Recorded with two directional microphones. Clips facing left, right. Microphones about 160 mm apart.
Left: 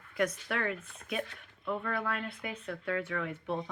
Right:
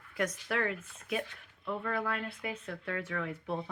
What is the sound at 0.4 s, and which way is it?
Speech, 25° right (ahead or behind).